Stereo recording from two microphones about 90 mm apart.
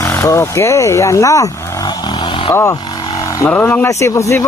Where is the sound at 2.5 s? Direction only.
30° left (ahead or behind).